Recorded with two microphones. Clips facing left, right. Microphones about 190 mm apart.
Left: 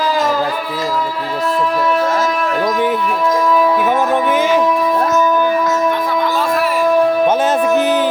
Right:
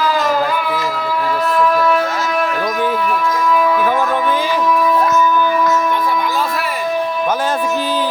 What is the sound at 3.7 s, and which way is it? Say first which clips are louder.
Music: left 2 dB; 20° left (ahead or behind).